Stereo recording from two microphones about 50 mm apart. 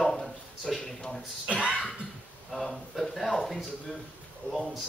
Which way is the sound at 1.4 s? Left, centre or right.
Right.